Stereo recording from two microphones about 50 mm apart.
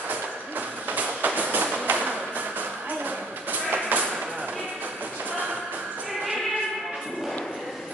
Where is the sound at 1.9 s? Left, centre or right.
Right.